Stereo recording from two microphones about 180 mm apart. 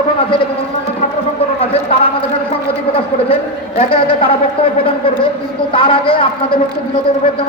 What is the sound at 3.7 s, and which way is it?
A man's voice, 30° left (ahead or behind).